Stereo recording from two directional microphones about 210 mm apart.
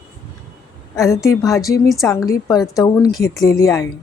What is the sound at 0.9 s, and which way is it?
A woman's voice, 15° left (ahead or behind).